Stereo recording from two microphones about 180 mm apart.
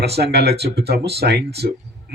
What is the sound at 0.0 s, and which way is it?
A man's voice, 65° right (ahead or behind).